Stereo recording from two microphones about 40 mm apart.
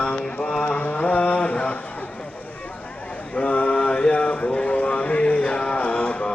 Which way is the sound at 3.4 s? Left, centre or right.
Left.